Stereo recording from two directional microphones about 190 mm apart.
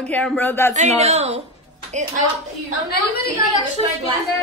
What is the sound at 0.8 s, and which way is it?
Speech, 35° right (ahead or behind).